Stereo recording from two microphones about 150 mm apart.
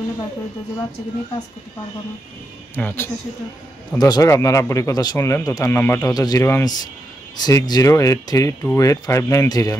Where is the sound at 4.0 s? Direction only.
25° left (ahead or behind).